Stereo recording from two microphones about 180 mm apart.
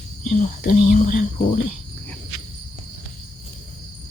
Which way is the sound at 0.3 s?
50° left (ahead or behind).